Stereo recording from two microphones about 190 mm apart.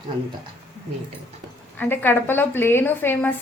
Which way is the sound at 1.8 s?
10° left (ahead or behind).